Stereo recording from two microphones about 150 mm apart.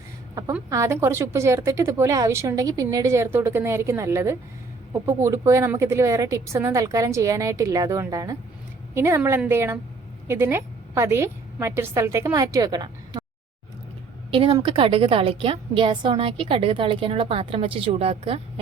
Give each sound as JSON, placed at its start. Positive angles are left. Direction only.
{"t": 0.7, "sound": "a woman's voice", "side_deg": -20}
{"t": 14.3, "sound": "a woman's voice", "side_deg": -35}